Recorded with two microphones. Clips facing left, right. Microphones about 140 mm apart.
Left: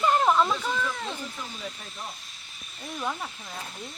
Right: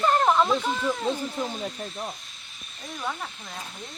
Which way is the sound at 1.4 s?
50° right (ahead or behind).